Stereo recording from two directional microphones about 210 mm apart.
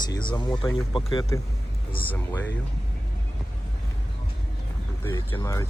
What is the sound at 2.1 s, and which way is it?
Speech, 10° left (ahead or behind).